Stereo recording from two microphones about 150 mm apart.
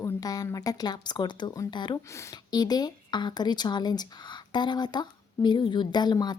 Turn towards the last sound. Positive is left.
turn(degrees=25)  # may be behind; listen again after turning